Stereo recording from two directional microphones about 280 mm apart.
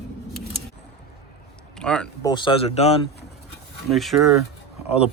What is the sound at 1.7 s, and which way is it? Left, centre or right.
Speech, centre.